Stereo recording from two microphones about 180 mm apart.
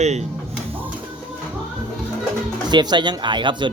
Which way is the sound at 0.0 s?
40° right (ahead or behind).